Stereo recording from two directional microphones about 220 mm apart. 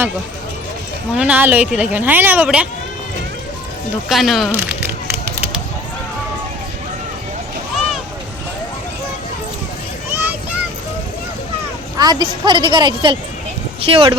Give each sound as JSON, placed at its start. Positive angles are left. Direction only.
{"t": 1.1, "sound": "speech", "side_deg": -5}
{"t": 4.1, "sound": "speech", "side_deg": 0}
{"t": 10.1, "sound": "a sound", "side_deg": -10}
{"t": 11.9, "sound": "a woman's voice", "side_deg": -20}